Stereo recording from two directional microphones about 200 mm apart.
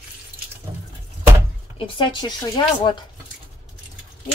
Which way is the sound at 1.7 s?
25° left (ahead or behind).